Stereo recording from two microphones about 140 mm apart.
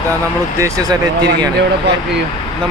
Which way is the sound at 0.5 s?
20° right (ahead or behind).